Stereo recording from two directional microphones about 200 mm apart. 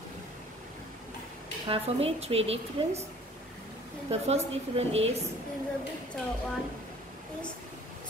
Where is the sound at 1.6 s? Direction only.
30° right (ahead or behind).